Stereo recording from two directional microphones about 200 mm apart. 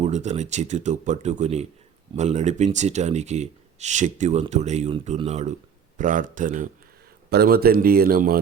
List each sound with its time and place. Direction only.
0.0 s speech: 35° right (ahead or behind)
7.3 s speech: 50° right (ahead or behind)